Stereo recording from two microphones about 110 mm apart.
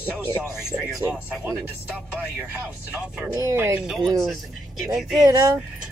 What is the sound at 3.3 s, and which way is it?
Speech, 25° right (ahead or behind).